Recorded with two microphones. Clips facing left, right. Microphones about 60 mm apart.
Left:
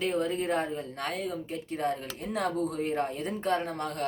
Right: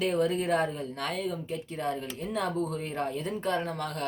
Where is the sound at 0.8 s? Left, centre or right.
Left.